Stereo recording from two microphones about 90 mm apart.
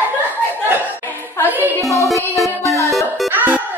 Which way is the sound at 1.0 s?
20° left (ahead or behind).